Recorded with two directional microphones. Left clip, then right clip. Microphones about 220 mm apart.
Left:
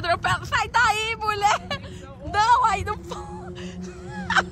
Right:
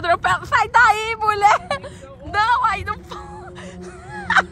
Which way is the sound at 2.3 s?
15° left (ahead or behind).